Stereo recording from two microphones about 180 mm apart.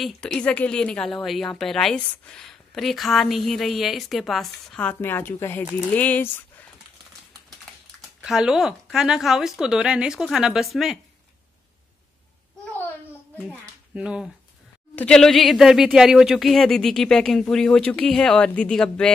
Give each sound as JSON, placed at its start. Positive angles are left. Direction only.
{"t": 0.0, "sound": "a woman's voice", "side_deg": 5}
{"t": 8.2, "sound": "a woman's voice", "side_deg": -5}
{"t": 13.4, "sound": "a woman's voice", "side_deg": -5}